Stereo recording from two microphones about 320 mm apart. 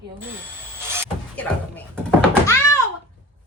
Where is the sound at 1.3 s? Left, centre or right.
Centre.